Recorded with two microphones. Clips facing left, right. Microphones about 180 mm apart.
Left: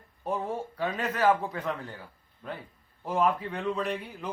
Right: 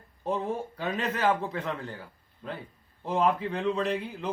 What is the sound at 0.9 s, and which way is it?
Speech, 25° right (ahead or behind).